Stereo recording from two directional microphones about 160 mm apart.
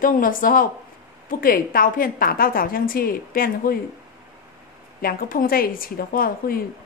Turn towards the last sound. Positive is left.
turn(degrees=65)  # may be behind; listen again after turning